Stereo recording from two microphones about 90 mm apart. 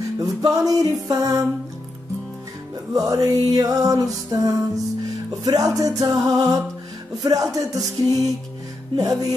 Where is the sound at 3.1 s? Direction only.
40° right (ahead or behind).